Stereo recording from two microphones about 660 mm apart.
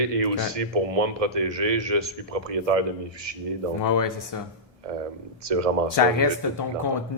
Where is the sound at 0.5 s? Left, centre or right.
Right.